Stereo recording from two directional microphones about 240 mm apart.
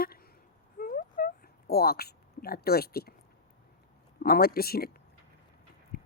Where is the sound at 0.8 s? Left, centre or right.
Left.